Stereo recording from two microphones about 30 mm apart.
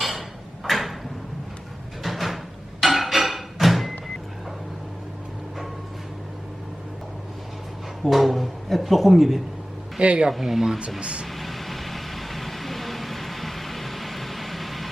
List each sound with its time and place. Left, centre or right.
0.0 s a sound: centre
2.0 s a sound: centre
2.8 s music: centre
8.1 s speech: centre
10.0 s speech: right
10.3 s speech: centre
11.0 s speech: right
11.3 s vehicle: centre